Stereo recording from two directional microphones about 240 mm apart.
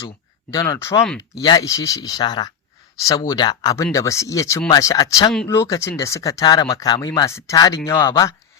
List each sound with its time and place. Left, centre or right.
0.5 s speech: centre